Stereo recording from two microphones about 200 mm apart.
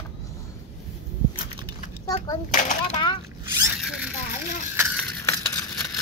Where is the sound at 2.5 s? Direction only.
40° left (ahead or behind).